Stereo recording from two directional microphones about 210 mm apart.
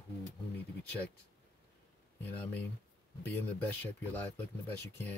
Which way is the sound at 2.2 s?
10° left (ahead or behind).